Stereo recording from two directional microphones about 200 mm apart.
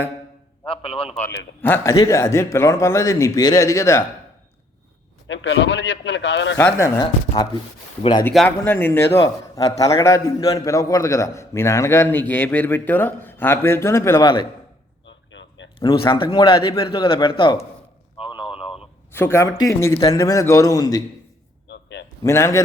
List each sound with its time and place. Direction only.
0.6 s a man's voice: 30° left (ahead or behind)
1.6 s a man's voice: 15° left (ahead or behind)
5.3 s a man's voice: 65° left (ahead or behind)
6.6 s a man's voice: 10° left (ahead or behind)
8.4 s a man's voice: 10° left (ahead or behind)
15.0 s a sound: 65° left (ahead or behind)
15.8 s a man's voice: 25° left (ahead or behind)
18.2 s a sound: 25° left (ahead or behind)
19.1 s a man's voice: 10° left (ahead or behind)
21.7 s a sound: 60° left (ahead or behind)
22.2 s a man's voice: 15° left (ahead or behind)